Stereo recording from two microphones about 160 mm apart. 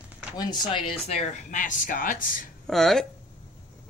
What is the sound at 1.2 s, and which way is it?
Speech, 50° left (ahead or behind).